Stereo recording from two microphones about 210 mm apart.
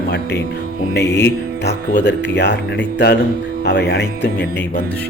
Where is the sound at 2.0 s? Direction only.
55° left (ahead or behind).